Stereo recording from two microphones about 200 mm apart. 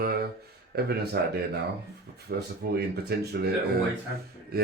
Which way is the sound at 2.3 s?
55° right (ahead or behind).